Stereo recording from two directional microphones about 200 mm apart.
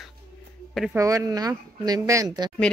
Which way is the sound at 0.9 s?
15° right (ahead or behind).